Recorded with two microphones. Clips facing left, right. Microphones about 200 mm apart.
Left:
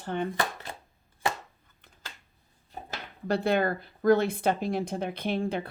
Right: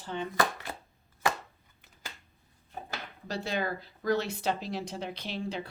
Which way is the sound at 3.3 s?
55° left (ahead or behind).